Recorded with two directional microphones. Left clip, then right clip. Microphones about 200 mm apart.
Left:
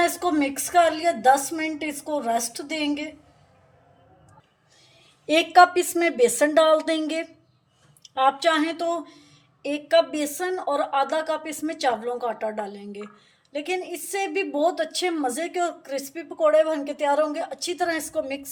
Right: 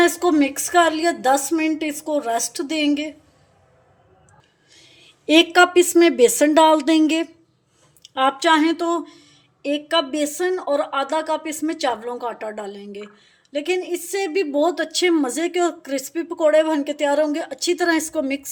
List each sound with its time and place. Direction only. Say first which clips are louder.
0.0 s a woman's voice: right 5 dB; 30° right (ahead or behind)
4.7 s a woman's voice: right 7 dB; 40° right (ahead or behind)